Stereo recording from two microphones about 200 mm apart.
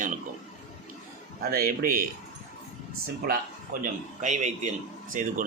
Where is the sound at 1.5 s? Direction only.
45° right (ahead or behind).